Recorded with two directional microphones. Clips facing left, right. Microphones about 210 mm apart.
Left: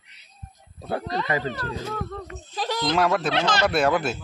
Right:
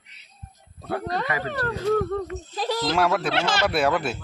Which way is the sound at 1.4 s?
60° right (ahead or behind).